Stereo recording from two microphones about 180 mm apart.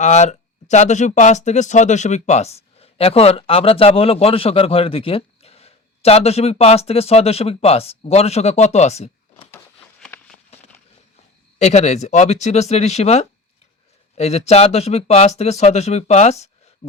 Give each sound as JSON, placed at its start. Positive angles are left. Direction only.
{"t": 0.0, "sound": "speech", "side_deg": 40}
{"t": 10.0, "sound": "a sound", "side_deg": 5}
{"t": 11.6, "sound": "speech", "side_deg": 40}